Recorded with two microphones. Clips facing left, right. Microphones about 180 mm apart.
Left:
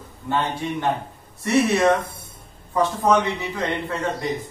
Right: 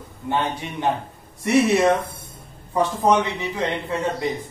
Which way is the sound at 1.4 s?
15° right (ahead or behind).